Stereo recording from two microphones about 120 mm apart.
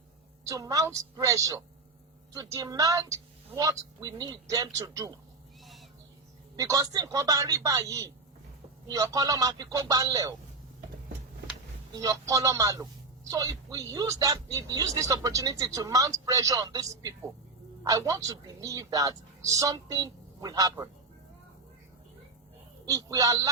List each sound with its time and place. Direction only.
0.4 s speech: 30° right (ahead or behind)
6.6 s speech: 30° right (ahead or behind)
11.9 s speech: 30° right (ahead or behind)
22.9 s speech: 30° right (ahead or behind)